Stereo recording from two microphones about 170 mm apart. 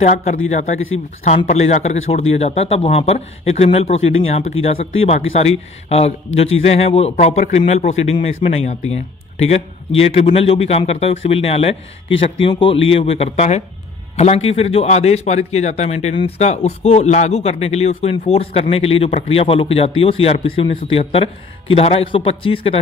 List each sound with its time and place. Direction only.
0.0 s speech: 45° left (ahead or behind)